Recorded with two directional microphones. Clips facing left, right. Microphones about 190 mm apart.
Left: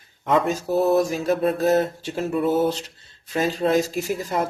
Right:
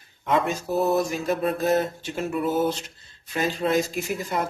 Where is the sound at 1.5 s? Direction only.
35° left (ahead or behind).